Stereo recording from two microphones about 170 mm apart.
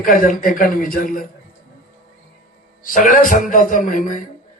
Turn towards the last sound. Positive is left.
turn(degrees=50)  # may be behind; listen again after turning